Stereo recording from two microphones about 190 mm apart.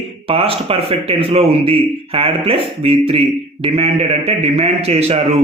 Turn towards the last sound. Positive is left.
turn(degrees=-35)  # may be behind; listen again after turning